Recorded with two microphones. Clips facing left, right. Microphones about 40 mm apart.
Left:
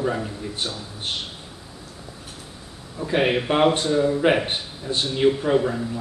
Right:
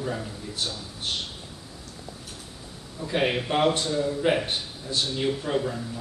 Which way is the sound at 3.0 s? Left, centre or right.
Centre.